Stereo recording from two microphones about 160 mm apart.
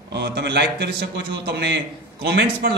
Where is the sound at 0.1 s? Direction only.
90° right.